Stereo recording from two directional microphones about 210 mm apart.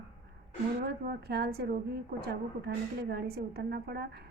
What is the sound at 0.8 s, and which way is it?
A woman's voice, 50° right (ahead or behind).